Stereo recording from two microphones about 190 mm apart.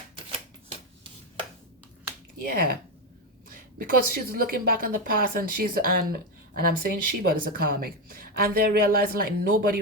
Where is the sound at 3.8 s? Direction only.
50° right (ahead or behind).